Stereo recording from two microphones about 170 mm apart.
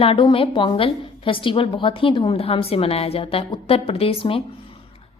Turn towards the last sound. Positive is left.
turn(degrees=35)  # may be behind; listen again after turning